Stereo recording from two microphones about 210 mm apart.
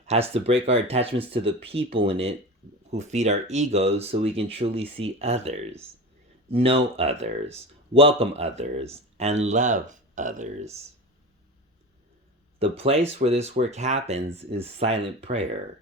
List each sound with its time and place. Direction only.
0.0 s speech: 30° right (ahead or behind)
12.5 s speech: 30° right (ahead or behind)